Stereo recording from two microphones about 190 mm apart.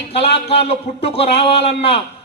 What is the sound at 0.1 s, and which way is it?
A man's voice, 30° left (ahead or behind).